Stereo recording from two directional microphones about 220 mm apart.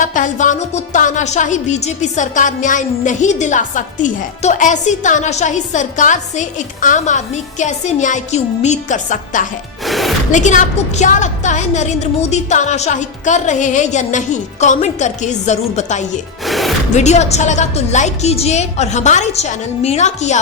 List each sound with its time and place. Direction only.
0.0 s music: 35° left (ahead or behind)
9.8 s music: centre (ahead or behind)
10.3 s music: 35° left (ahead or behind)
16.5 s music: centre (ahead or behind)
16.9 s music: 30° left (ahead or behind)